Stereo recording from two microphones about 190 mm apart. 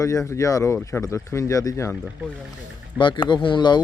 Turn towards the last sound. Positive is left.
turn(degrees=25)  # may be behind; listen again after turning